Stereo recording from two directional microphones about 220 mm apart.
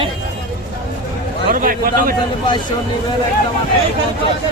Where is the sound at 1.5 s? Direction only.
40° right (ahead or behind).